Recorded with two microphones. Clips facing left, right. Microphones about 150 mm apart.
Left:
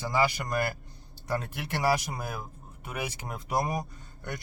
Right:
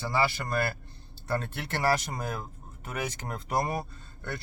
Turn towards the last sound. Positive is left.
turn(degrees=15)  # may be behind; listen again after turning